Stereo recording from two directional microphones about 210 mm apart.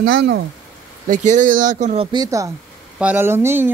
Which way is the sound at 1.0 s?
35° right (ahead or behind).